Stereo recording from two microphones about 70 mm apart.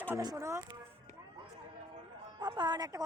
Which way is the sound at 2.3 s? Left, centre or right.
Right.